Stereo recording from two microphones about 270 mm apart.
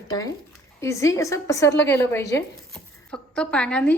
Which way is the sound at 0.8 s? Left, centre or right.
Centre.